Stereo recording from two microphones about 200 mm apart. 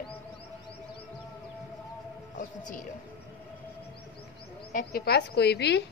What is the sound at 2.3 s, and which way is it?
Speech, 40° left (ahead or behind).